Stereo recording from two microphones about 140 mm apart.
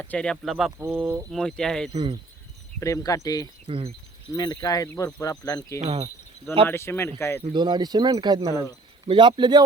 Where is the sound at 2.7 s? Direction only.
25° left (ahead or behind).